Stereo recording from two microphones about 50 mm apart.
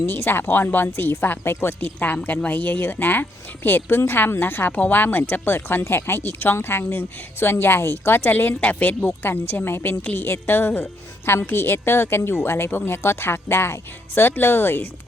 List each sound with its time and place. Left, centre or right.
0.0 s speech: left
2.2 s speech: left
5.5 s speech: left
9.0 s speech: left